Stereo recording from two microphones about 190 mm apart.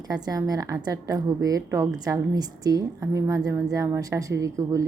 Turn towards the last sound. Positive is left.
turn(degrees=-15)  # may be behind; listen again after turning